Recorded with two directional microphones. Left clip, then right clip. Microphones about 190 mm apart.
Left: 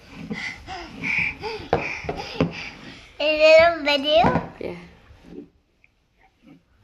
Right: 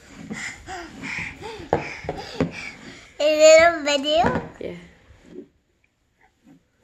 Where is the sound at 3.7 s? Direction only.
20° right (ahead or behind).